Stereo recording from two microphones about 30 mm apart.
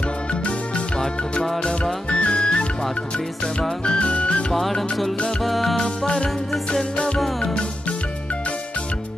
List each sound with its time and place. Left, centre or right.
2.0 s music: left
3.8 s music: left
4.1 s music: left
5.4 s music: centre
6.7 s music: left